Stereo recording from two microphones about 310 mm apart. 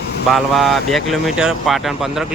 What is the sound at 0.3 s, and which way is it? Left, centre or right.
Speech, centre.